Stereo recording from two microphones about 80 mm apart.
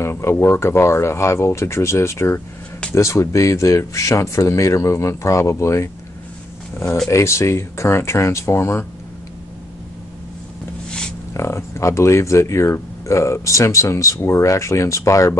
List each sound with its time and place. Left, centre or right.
0.0 s speech: left
7.1 s speech: left
10.9 s a sound: centre
11.3 s speech: left